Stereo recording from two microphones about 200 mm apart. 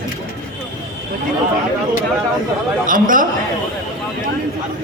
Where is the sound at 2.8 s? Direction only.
40° right (ahead or behind).